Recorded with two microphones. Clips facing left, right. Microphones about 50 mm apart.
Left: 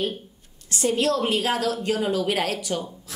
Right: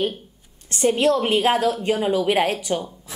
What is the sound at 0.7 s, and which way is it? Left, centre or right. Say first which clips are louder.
A woman's voice: right 4 dB; right.